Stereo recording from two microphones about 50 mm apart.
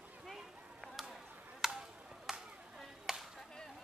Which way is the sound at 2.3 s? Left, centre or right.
Centre.